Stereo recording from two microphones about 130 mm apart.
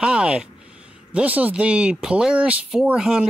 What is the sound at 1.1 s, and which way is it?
A man's voice, 10° right (ahead or behind).